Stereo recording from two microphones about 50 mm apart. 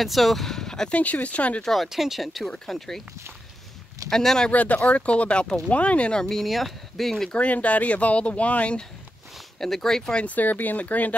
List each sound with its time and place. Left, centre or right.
0.0 s speech: centre
0.9 s speech: left
1.6 s speech: centre
1.9 s speech: centre
4.1 s speech: centre
4.5 s speech: left
6.2 s speech: centre
7.3 s speech: left
9.6 s speech: centre
10.2 s speech: left